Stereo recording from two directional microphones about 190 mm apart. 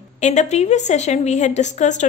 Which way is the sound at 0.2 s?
35° left (ahead or behind).